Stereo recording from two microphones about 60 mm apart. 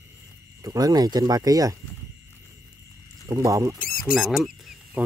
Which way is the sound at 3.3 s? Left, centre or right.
Right.